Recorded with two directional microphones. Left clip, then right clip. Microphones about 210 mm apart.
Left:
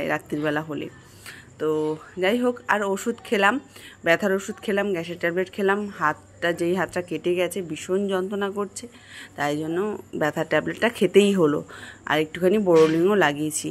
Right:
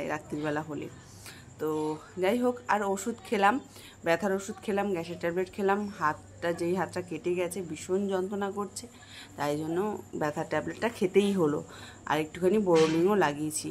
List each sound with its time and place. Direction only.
0.0 s speech: 20° left (ahead or behind)